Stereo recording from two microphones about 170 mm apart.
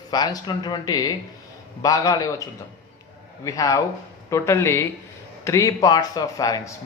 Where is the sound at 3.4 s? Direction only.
20° left (ahead or behind).